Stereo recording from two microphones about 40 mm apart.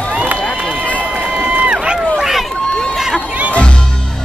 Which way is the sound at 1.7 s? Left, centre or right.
Right.